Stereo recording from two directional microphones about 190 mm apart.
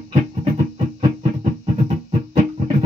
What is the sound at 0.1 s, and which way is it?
Music, 35° right (ahead or behind).